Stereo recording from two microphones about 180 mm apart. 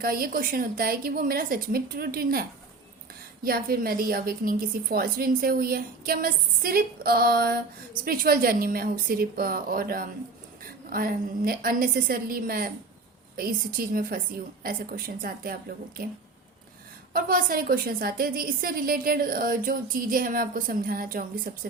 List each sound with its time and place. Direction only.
0.0 s a woman's voice: 55° right (ahead or behind)
17.2 s a woman's voice: 50° right (ahead or behind)